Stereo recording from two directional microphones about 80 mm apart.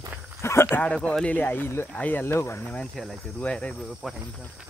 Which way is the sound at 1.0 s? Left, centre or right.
Centre.